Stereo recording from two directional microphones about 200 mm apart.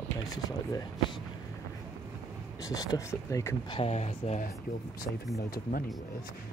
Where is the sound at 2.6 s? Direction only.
20° left (ahead or behind); by 4.5 s 35° left (ahead or behind).